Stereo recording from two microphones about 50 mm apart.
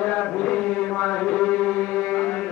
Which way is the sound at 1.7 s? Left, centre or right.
Left.